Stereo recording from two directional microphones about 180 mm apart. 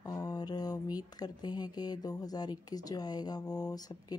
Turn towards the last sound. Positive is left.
turn(degrees=20)  # may be behind; listen again after turning